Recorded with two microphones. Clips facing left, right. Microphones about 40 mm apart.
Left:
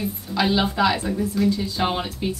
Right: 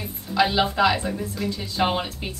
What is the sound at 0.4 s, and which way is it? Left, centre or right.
Speech, centre.